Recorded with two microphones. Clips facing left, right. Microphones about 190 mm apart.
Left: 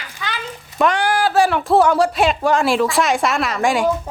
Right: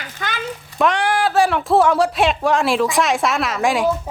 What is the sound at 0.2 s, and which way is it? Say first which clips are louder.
Frying: right 1 dB; 50° right (ahead or behind).